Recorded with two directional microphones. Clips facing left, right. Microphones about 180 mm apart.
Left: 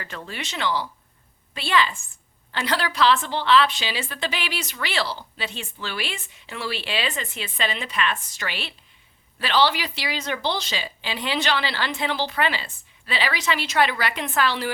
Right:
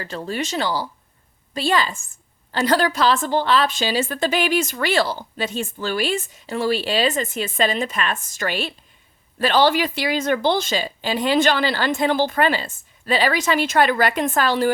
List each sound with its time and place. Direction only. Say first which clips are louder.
0.0 s a woman's voice: right 8 dB; 35° right (ahead or behind)